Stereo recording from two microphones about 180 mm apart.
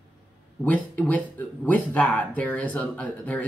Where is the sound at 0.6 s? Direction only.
10° left (ahead or behind).